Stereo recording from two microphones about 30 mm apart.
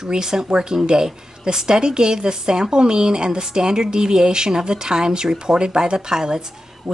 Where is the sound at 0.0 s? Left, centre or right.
Right.